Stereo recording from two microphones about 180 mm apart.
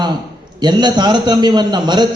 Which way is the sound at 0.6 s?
25° right (ahead or behind).